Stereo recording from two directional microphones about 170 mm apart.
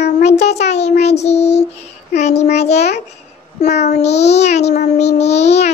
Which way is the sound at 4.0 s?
40° left (ahead or behind).